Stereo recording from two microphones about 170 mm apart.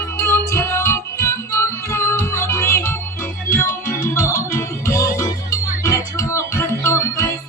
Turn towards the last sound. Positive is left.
turn(degrees=15)  # may be behind; listen again after turning